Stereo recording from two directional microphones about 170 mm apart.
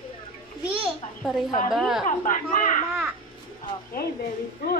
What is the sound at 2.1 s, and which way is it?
Speech, 50° left (ahead or behind).